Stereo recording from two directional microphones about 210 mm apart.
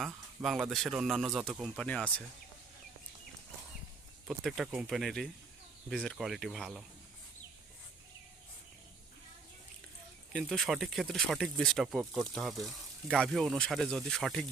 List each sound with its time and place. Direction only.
0.0 s speech: centre (ahead or behind)
4.3 s speech: centre (ahead or behind)
10.3 s speech: centre (ahead or behind)